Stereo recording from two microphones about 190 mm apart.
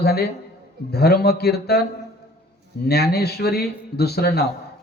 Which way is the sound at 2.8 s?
55° left (ahead or behind).